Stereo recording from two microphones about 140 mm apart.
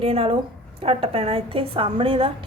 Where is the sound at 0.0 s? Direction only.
40° right (ahead or behind).